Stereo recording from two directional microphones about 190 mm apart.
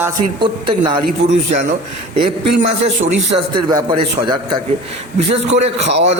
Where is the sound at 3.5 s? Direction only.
20° right (ahead or behind).